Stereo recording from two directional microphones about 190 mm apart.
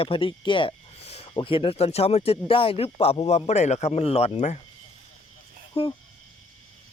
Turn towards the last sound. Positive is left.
turn(degrees=30)  # may be behind; listen again after turning